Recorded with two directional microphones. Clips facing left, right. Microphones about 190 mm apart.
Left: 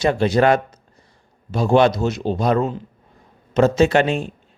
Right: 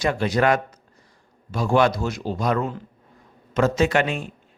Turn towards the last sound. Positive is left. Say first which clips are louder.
# left 5 dB
turn(degrees=30)  # may be behind; listen again after turning